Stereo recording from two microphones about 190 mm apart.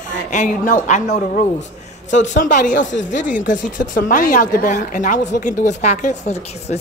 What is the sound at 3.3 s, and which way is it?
Speech, 45° left (ahead or behind).